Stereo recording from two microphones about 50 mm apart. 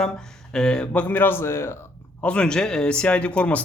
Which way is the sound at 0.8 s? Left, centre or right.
Left.